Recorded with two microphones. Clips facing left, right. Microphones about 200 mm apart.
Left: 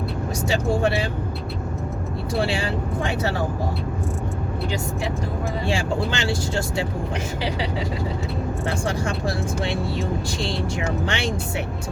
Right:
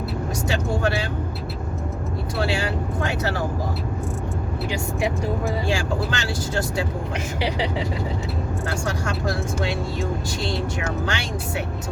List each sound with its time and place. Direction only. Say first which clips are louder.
2.4 s speech: right 1 dB; 30° left (ahead or behind)
6.1 s speech: left 2 dB; 25° left (ahead or behind)
8.6 s speech: left 2 dB; 30° left (ahead or behind)
11.0 s speech: left 2 dB; 30° left (ahead or behind)